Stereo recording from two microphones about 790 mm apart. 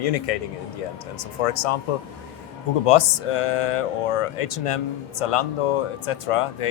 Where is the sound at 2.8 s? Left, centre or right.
Left.